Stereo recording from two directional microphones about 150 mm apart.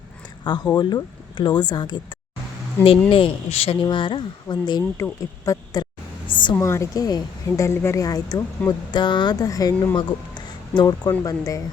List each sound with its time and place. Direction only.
0.4 s speech: 25° left (ahead or behind)
3.1 s a woman's voice: 35° left (ahead or behind)
4.9 s a sound: 20° left (ahead or behind)
6.6 s speech: 20° left (ahead or behind)